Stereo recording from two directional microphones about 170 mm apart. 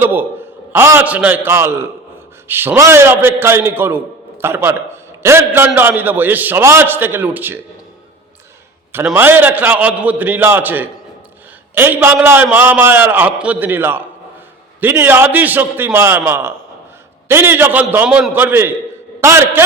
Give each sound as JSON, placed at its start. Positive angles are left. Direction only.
{"t": 0.0, "sound": "a man's voice", "side_deg": -10}
{"t": 8.9, "sound": "a man's voice", "side_deg": -10}